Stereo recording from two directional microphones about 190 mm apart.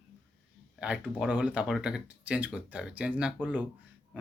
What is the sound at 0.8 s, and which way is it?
Speech, 5° right (ahead or behind).